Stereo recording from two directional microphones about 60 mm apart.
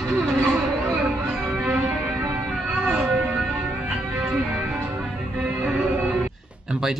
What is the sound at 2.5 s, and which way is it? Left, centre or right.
Music, centre.